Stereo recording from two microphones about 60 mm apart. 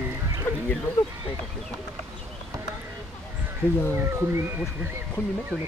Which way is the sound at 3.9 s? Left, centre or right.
Right.